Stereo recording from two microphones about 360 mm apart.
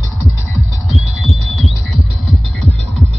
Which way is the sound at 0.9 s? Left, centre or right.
Centre.